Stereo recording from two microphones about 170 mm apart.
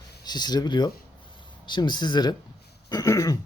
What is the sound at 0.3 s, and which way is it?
Speech, 25° left (ahead or behind).